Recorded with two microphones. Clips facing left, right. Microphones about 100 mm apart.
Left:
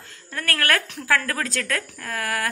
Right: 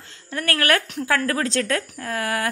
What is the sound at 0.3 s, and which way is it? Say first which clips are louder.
A woman's voice: right 3 dB; 20° right (ahead or behind).